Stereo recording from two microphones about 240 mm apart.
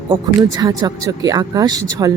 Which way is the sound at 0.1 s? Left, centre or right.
Centre.